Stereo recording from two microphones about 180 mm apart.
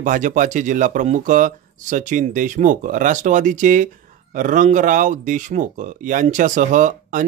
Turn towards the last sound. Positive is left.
turn(degrees=-45)  # may be behind; listen again after turning